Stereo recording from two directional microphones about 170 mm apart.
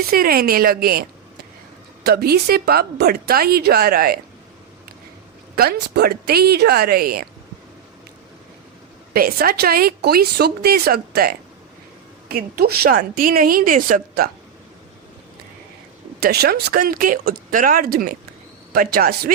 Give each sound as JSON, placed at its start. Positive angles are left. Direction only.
{"t": 0.1, "sound": "a woman's voice", "side_deg": -60}
{"t": 2.0, "sound": "a woman's voice", "side_deg": -70}
{"t": 5.5, "sound": "a woman's voice", "side_deg": -70}
{"t": 9.1, "sound": "a woman's voice", "side_deg": -60}
{"t": 16.2, "sound": "a woman's voice", "side_deg": -65}